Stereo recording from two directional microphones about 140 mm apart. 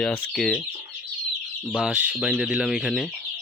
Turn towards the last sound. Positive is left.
turn(degrees=0)  # may be behind; listen again after turning